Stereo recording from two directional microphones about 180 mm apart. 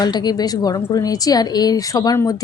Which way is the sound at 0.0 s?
25° left (ahead or behind).